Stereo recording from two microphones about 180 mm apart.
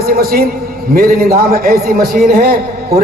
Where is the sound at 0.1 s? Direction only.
55° right (ahead or behind).